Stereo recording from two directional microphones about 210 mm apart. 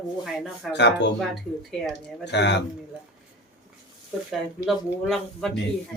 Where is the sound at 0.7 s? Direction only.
55° left (ahead or behind).